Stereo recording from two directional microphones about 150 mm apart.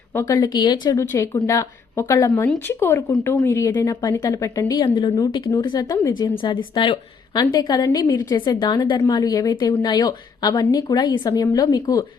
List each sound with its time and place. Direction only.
0.1 s a woman's voice: 20° left (ahead or behind)
0.9 s a woman's voice: 15° left (ahead or behind)